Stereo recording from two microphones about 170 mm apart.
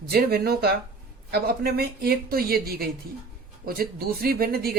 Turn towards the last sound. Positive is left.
turn(degrees=-65)  # may be behind; listen again after turning